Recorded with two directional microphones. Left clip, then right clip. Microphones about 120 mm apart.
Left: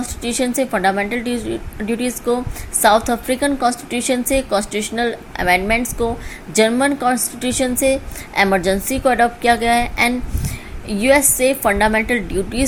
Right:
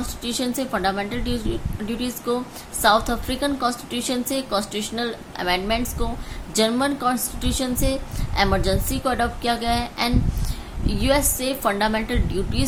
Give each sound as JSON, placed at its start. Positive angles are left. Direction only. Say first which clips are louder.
{"t": 0.2, "sound": "a woman's voice", "louder": "left 7 dB", "side_deg": 30}